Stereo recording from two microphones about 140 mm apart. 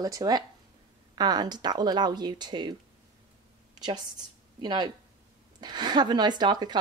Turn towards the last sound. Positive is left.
turn(degrees=-30)  # may be behind; listen again after turning